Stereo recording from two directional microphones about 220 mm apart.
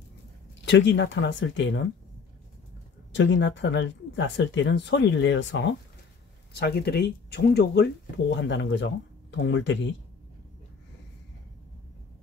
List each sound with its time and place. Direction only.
0.7 s speech: 55° left (ahead or behind)
3.1 s speech: 55° left (ahead or behind)